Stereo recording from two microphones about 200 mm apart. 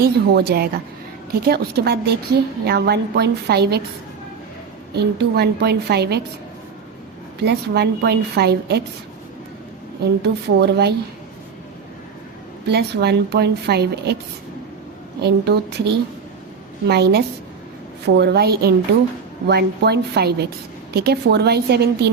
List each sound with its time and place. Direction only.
0.0 s a woman's voice: 50° right (ahead or behind)
4.9 s a woman's voice: 55° right (ahead or behind)
7.3 s a woman's voice: 55° right (ahead or behind)
10.2 s a woman's voice: 55° right (ahead or behind)
12.6 s a woman's voice: 55° right (ahead or behind)
15.2 s a woman's voice: 55° right (ahead or behind)
16.9 s a woman's voice: 55° right (ahead or behind)